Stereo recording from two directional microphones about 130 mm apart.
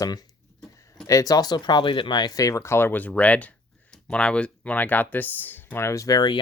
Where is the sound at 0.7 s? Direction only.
25° left (ahead or behind).